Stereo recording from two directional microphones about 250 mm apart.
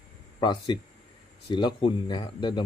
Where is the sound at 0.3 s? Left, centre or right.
Centre.